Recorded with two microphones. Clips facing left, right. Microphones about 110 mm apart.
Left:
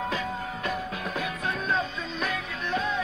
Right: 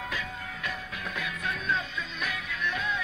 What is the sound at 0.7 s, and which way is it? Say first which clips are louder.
Music: left 6 dB; 35° left (ahead or behind).